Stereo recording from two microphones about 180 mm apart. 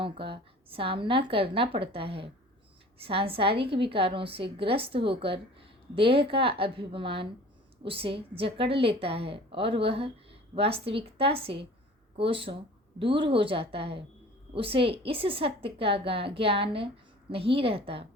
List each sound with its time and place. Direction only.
0.0 s a woman's voice: 30° right (ahead or behind)